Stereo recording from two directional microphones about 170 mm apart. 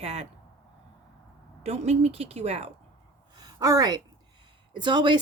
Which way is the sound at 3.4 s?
20° right (ahead or behind).